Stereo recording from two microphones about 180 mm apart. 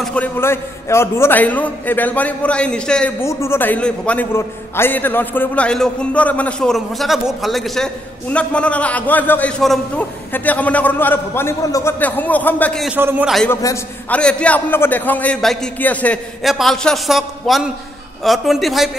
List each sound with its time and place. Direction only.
0.0 s a man's voice: 5° left (ahead or behind)
12.8 s a man's voice: 10° right (ahead or behind)
13.5 s a man's voice: 15° left (ahead or behind); by 18.9 s centre (ahead or behind)